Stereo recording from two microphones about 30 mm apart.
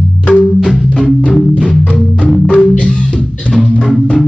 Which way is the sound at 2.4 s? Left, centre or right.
Left.